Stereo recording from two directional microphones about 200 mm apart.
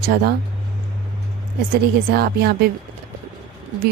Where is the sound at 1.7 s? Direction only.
50° right (ahead or behind).